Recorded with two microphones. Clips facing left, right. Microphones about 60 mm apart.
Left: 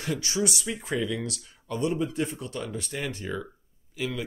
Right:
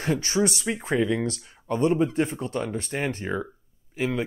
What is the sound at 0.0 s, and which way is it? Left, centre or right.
Speech, right.